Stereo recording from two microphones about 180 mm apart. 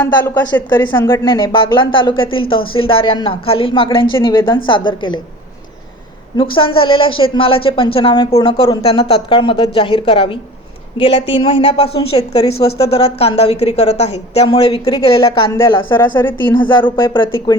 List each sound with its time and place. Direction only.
0.3 s speech: 15° left (ahead or behind)
6.3 s a woman's voice: 30° left (ahead or behind)
15.5 s a woman's voice: 15° left (ahead or behind)
16.6 s speech: 25° left (ahead or behind)